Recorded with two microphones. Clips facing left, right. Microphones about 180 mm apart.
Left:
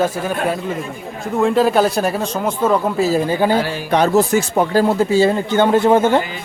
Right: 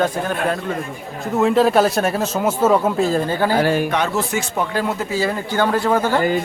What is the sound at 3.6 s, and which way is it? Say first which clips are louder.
Speech: right 6 dB; 55° right (ahead or behind).